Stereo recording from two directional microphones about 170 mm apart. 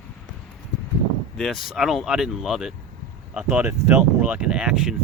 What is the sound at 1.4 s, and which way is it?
Speech, centre (ahead or behind).